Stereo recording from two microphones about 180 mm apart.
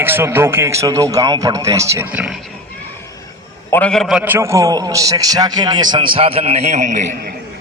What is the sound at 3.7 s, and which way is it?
Speech, 5° left (ahead or behind).